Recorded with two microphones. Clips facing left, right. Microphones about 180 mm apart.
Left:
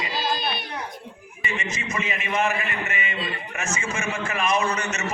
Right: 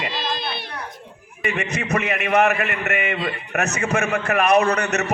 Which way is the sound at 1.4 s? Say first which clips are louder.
Right 6 dB; 65° right (ahead or behind).